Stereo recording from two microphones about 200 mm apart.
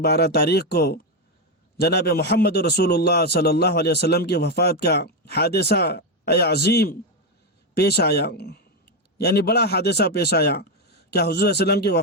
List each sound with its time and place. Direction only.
0.0 s a man's voice: 55° left (ahead or behind)